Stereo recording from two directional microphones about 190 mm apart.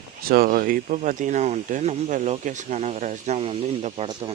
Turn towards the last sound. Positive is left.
turn(degrees=-35)  # may be behind; listen again after turning